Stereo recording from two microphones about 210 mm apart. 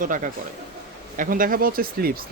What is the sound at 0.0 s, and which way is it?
Speech, 40° right (ahead or behind).